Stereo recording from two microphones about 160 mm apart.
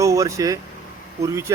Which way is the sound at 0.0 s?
20° right (ahead or behind).